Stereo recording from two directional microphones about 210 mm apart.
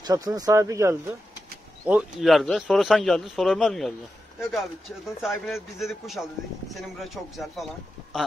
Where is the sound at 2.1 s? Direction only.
Centre (ahead or behind).